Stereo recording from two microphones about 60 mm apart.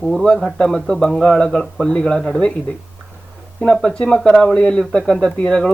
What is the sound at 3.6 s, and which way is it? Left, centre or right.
Speech, centre.